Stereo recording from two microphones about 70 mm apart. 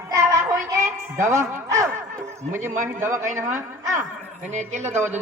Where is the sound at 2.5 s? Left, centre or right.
Right.